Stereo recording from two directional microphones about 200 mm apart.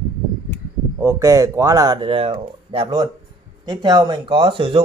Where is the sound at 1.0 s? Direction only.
15° right (ahead or behind).